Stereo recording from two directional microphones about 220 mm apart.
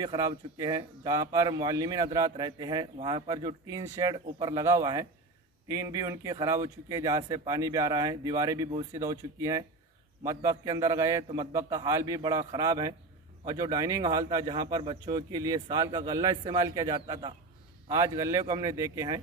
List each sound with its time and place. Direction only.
0.0 s speech: 20° right (ahead or behind)